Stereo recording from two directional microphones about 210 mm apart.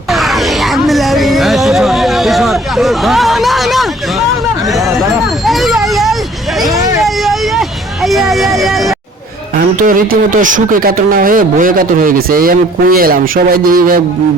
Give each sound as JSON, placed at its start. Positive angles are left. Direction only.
{"t": 0.1, "sound": "music", "side_deg": 0}
{"t": 5.5, "sound": "a sound", "side_deg": 0}
{"t": 7.0, "sound": "vehicle", "side_deg": 0}
{"t": 9.6, "sound": "a man's voice", "side_deg": -40}